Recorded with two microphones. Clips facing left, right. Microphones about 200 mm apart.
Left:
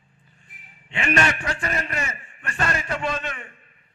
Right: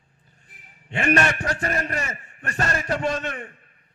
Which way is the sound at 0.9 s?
45° right (ahead or behind).